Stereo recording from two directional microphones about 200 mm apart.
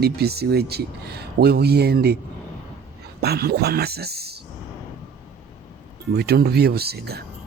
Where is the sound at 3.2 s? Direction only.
50° right (ahead or behind).